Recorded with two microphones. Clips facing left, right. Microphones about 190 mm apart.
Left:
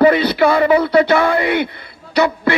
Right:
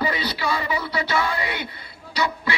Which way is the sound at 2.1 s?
55° left (ahead or behind).